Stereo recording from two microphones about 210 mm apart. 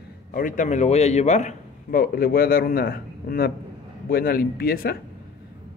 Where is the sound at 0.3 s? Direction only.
40° left (ahead or behind).